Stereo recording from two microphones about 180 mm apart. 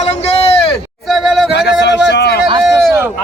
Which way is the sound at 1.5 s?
70° left (ahead or behind).